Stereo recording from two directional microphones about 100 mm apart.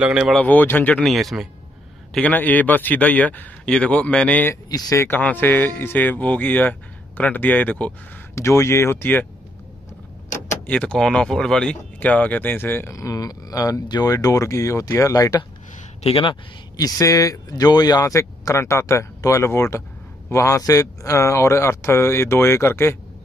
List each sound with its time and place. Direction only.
0.0 s speech: 10° right (ahead or behind)
0.4 s speech: 15° left (ahead or behind)
1.0 s speech: centre (ahead or behind)
2.1 s speech: 15° left (ahead or behind)
4.6 s speech: 35° left (ahead or behind)
5.0 s speech: 20° left (ahead or behind)
8.4 s a man's voice: 25° left (ahead or behind)
10.7 s speech: 10° left (ahead or behind)
12.9 s speech: 35° left (ahead or behind)
16.0 s speech: 70° left (ahead or behind)
16.7 s a man's voice: 35° left (ahead or behind)